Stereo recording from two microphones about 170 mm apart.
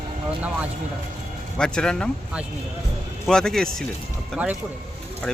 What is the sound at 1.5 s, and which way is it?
Speech, 5° left (ahead or behind).